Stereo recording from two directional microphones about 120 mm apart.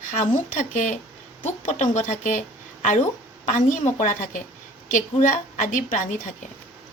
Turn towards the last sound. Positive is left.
turn(degrees=90)